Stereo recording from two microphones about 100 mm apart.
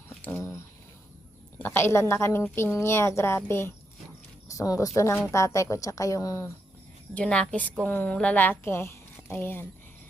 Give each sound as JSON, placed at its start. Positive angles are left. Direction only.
{"t": 0.3, "sound": "a sound", "side_deg": 25}
{"t": 1.5, "sound": "a woman's voice", "side_deg": 20}
{"t": 7.1, "sound": "a woman's voice", "side_deg": 10}